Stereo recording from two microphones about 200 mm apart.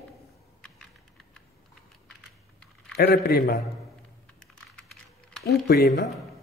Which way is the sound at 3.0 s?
50° left (ahead or behind).